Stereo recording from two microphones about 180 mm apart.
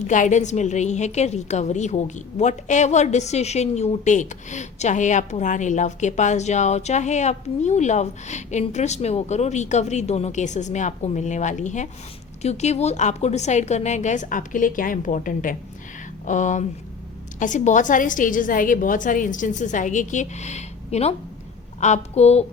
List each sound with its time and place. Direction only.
0.1 s a woman's voice: 45° left (ahead or behind)